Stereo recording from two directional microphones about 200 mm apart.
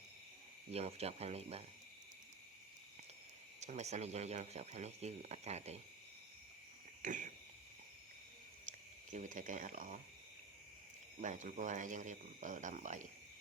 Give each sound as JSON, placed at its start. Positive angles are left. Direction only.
{"t": 0.7, "sound": "speech", "side_deg": -30}
{"t": 3.6, "sound": "speech", "side_deg": -35}
{"t": 7.0, "sound": "cricket", "side_deg": -40}
{"t": 8.6, "sound": "speech", "side_deg": -40}
{"t": 11.2, "sound": "speech", "side_deg": -40}